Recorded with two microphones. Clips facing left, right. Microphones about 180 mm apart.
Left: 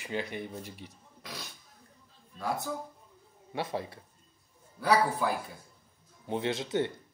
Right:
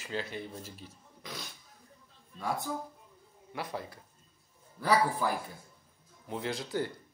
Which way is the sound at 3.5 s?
25° left (ahead or behind).